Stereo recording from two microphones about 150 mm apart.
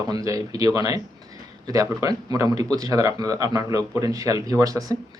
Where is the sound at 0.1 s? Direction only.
25° right (ahead or behind).